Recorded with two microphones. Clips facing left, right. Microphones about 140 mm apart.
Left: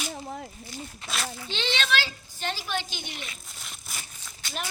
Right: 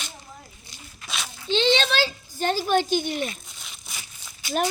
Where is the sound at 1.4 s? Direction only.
30° right (ahead or behind); by 3.3 s 45° right (ahead or behind).